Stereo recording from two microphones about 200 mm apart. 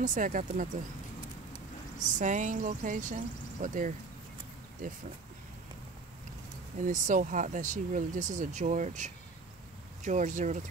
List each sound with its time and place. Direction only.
0.0 s speech: 40° right (ahead or behind)
2.1 s speech: 40° right (ahead or behind)
6.8 s speech: 40° right (ahead or behind)